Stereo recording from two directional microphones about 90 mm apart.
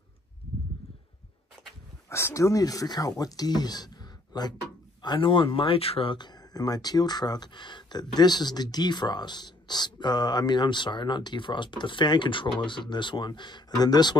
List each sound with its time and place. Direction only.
2.0 s speech: 30° left (ahead or behind); by 4.6 s 50° left (ahead or behind)
5.0 s speech: 60° left (ahead or behind); by 6.1 s 90° left
6.1 s speech: 50° left (ahead or behind)